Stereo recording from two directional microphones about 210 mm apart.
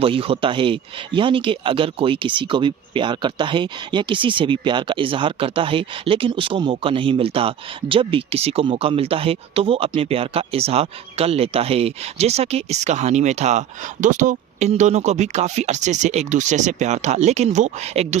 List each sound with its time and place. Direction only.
0.0 s speech: 25° right (ahead or behind)